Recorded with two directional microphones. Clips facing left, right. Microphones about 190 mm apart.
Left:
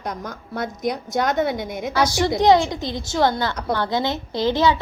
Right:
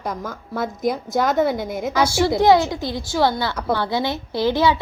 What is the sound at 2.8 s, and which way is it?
Speech, 20° left (ahead or behind).